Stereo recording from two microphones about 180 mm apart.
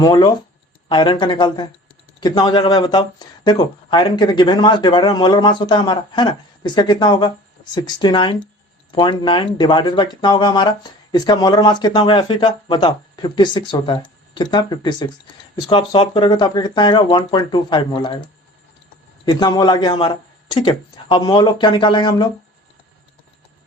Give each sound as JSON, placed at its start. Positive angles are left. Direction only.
{"t": 0.0, "sound": "speech", "side_deg": 25}
{"t": 19.2, "sound": "speech", "side_deg": 25}